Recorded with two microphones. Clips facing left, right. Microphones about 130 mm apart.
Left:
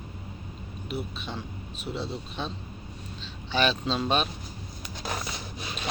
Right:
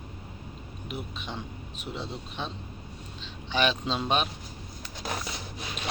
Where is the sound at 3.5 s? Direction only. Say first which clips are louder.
Left 1 dB; 15° right (ahead or behind).